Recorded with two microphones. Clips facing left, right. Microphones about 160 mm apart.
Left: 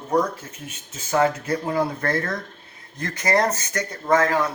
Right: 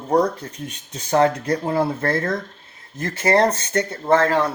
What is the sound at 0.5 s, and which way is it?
Speech, 5° left (ahead or behind).